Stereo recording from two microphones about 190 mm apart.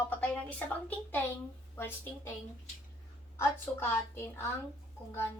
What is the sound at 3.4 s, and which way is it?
A woman's voice, 15° left (ahead or behind).